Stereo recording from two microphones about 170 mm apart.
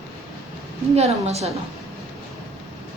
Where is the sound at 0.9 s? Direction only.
40° right (ahead or behind).